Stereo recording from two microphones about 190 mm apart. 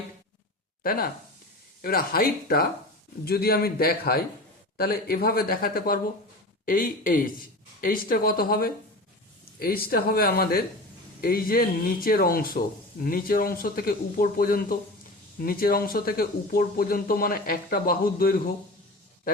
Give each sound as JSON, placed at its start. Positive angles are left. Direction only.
{"t": 0.8, "sound": "speech", "side_deg": 50}